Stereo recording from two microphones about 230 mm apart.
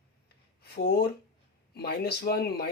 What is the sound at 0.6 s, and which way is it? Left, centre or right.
Speech, left.